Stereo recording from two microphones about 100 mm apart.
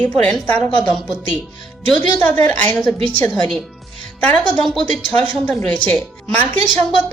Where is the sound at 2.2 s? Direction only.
15° left (ahead or behind).